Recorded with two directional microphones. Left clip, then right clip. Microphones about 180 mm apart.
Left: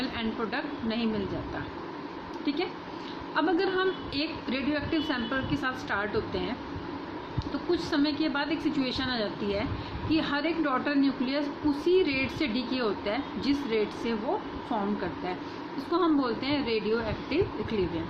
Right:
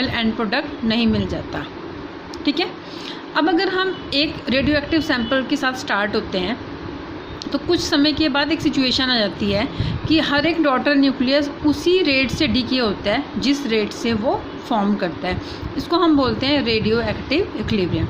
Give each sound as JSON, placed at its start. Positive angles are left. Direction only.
{"t": 0.0, "sound": "a woman's voice", "side_deg": -50}
{"t": 2.4, "sound": "a woman's voice", "side_deg": -50}
{"t": 7.5, "sound": "a woman's voice", "side_deg": -50}